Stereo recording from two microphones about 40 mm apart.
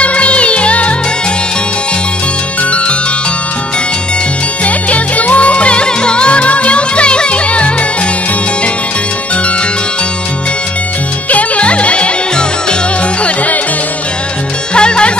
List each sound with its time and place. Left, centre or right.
0.0 s music: left
4.6 s music: left
11.2 s music: left
14.7 s music: left